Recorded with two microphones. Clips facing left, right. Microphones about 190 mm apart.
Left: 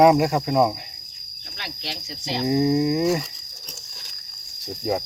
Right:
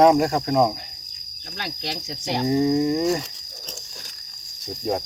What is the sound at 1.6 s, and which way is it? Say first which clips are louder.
Cricket: right 4 dB; 50° right (ahead or behind).